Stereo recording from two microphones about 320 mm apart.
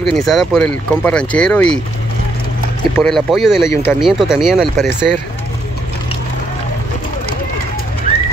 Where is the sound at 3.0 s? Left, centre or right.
Centre.